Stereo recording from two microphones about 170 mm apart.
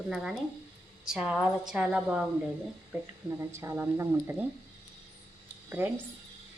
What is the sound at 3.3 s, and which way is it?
Speech, 15° right (ahead or behind).